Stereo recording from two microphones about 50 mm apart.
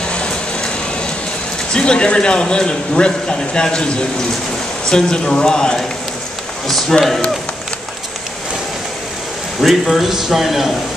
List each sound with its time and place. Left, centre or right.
0.1 s vehicle: centre
1.7 s a man's voice: centre
9.6 s a man's voice: centre